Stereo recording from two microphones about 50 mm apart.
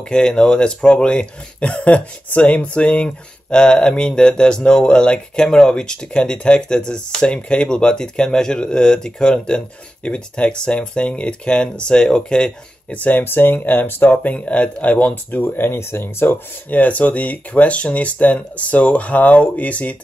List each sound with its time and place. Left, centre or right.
0.1 s speech: centre
12.9 s speech: left
13.2 s speech: left
14.1 s speech: left
15.4 s speech: left
16.7 s speech: left